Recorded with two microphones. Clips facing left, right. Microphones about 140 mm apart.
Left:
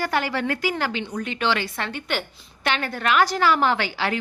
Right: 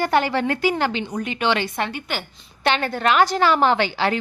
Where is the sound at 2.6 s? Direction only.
30° right (ahead or behind).